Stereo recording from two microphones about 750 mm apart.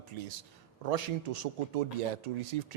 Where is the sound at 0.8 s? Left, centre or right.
Right.